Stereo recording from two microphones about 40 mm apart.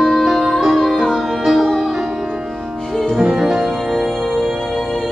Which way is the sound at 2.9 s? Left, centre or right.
Centre.